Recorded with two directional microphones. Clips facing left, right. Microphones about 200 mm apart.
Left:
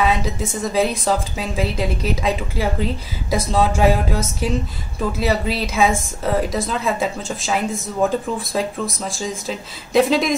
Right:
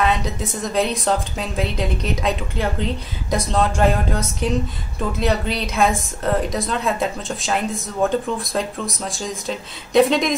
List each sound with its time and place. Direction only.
0.0 s a woman's voice: centre (ahead or behind)